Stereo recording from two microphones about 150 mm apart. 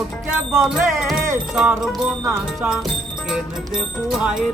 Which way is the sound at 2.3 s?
15° right (ahead or behind).